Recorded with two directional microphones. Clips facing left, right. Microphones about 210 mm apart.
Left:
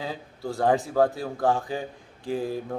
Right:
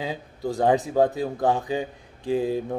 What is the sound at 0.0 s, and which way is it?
Speech, 20° right (ahead or behind).